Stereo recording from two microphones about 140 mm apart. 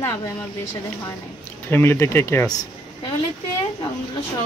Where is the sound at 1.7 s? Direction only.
15° left (ahead or behind).